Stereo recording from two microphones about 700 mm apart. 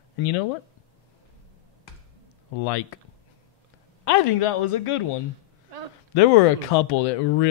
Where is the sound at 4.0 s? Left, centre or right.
Left.